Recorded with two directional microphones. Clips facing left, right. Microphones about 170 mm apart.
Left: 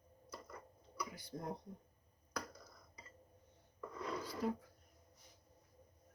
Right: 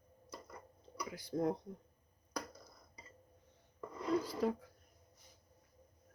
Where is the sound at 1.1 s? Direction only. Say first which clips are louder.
Right 13 dB; 90° right.